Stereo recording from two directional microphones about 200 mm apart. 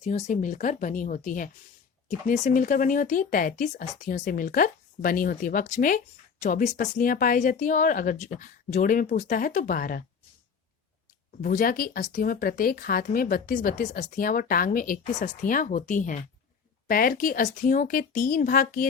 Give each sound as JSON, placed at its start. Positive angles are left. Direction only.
{"t": 0.0, "sound": "speech", "side_deg": 35}
{"t": 11.4, "sound": "speech", "side_deg": 45}